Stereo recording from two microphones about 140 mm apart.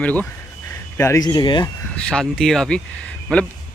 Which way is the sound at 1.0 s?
25° left (ahead or behind).